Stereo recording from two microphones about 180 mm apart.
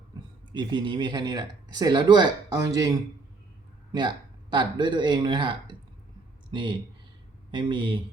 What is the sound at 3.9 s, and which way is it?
Speech, 25° right (ahead or behind).